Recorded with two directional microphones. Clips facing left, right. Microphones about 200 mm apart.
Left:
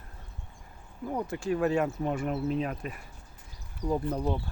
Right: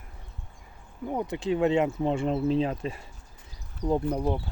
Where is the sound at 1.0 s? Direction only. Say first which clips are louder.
Right 2 dB; 20° right (ahead or behind).